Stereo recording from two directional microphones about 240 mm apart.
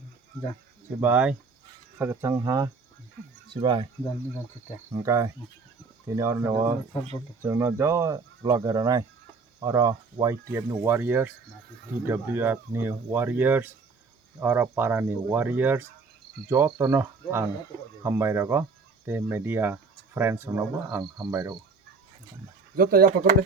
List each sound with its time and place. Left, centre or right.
1.0 s speech: centre
4.9 s speech: centre
22.7 s speech: right